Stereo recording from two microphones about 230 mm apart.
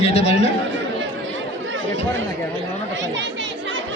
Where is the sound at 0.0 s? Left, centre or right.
Left.